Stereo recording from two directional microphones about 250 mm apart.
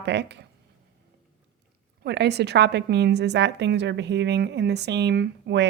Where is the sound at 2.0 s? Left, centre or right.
Right.